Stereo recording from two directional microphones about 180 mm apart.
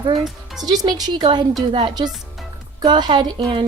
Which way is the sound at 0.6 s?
20° right (ahead or behind).